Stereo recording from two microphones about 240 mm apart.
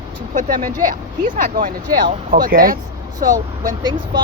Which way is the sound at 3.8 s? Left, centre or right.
Centre.